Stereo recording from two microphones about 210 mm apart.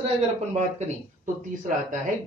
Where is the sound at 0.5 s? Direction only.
35° right (ahead or behind).